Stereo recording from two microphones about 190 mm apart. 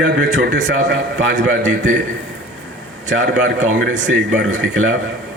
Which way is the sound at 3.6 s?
85° right.